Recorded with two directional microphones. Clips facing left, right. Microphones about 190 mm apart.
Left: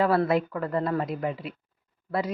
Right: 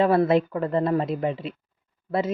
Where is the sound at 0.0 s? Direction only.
25° right (ahead or behind).